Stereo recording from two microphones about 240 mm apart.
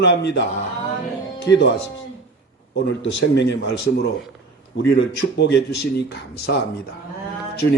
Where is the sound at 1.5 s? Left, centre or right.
Left.